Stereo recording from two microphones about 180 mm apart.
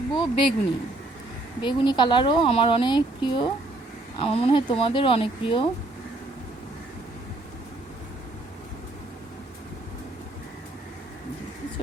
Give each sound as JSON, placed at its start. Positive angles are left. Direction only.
{"t": 0.1, "sound": "speech", "side_deg": 25}
{"t": 1.6, "sound": "speech", "side_deg": 25}